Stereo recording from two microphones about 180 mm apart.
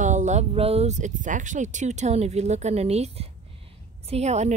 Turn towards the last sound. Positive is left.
turn(degrees=-40)  # may be behind; listen again after turning